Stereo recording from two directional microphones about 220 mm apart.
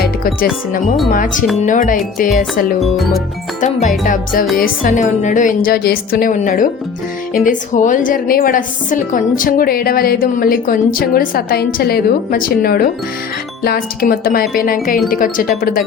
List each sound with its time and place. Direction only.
0.0 s a woman's voice: 40° left (ahead or behind)
2.8 s speech: centre (ahead or behind)
3.6 s a woman's voice: 35° left (ahead or behind)